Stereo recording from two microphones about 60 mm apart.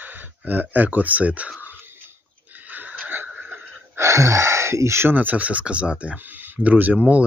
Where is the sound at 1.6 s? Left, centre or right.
Right.